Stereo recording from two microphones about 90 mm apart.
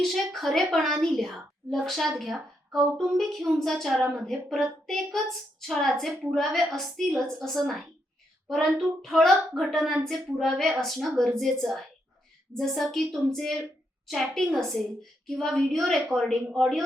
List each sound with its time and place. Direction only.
0.0 s a woman's voice: centre (ahead or behind)